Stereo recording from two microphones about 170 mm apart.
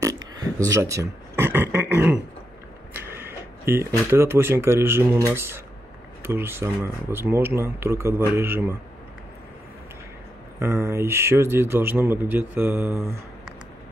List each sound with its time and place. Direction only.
0.0 s a sound: 20° right (ahead or behind)
0.7 s speech: 20° right (ahead or behind)
10.6 s speech: 15° right (ahead or behind)